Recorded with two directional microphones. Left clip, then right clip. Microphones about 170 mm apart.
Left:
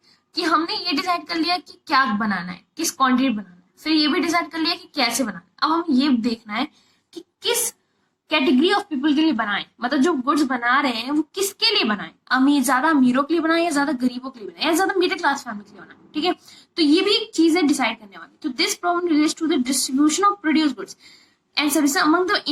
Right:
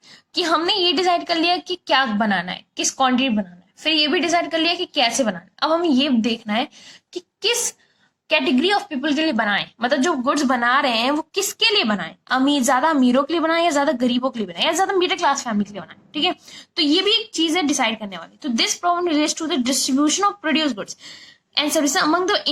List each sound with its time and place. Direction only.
0.3 s a woman's voice: 25° right (ahead or behind)
7.1 s a sound: 25° right (ahead or behind)
8.3 s a woman's voice: 25° right (ahead or behind)